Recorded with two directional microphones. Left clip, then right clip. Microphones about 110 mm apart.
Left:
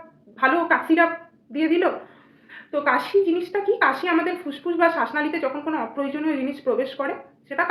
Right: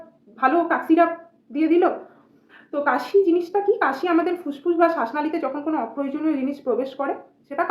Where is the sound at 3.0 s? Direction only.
40° right (ahead or behind).